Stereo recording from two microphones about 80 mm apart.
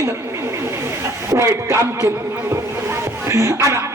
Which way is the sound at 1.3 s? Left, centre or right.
Right.